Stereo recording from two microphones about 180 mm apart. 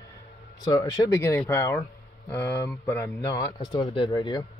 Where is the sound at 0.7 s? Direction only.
20° left (ahead or behind).